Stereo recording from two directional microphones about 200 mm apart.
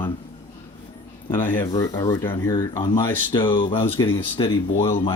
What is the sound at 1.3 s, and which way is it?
Speech, 10° left (ahead or behind).